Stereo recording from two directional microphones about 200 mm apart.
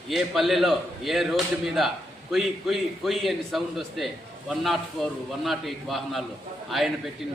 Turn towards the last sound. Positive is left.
turn(degrees=0)  # may be behind; listen again after turning